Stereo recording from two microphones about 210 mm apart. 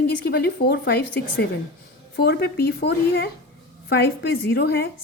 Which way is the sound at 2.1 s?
50° left (ahead or behind).